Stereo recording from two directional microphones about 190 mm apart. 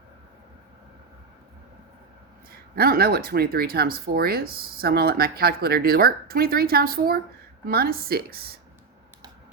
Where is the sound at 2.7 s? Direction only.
55° right (ahead or behind).